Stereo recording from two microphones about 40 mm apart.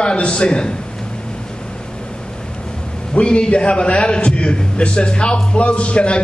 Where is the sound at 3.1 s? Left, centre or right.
Left.